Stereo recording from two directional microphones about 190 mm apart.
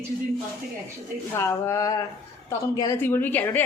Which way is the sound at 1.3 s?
15° left (ahead or behind).